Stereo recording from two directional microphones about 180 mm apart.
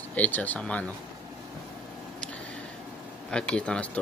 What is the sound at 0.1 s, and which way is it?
Speech, 10° left (ahead or behind).